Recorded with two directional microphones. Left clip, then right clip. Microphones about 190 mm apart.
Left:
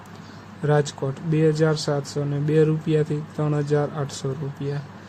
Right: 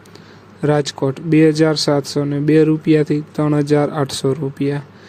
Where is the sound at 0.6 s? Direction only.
35° right (ahead or behind).